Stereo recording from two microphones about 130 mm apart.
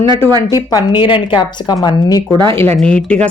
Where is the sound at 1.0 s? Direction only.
40° left (ahead or behind).